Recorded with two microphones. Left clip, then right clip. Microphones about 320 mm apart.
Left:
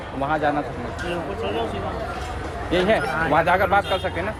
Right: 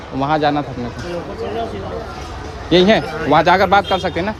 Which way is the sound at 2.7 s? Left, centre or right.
Right.